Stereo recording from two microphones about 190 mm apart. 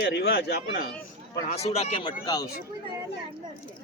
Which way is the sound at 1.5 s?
35° left (ahead or behind).